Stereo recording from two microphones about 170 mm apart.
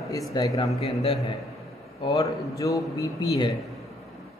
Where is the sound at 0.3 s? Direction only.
25° left (ahead or behind).